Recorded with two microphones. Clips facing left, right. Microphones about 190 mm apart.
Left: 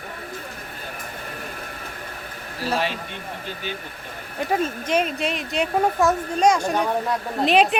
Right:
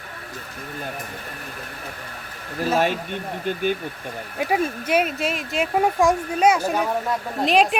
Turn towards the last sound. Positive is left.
turn(degrees=0)  # may be behind; listen again after turning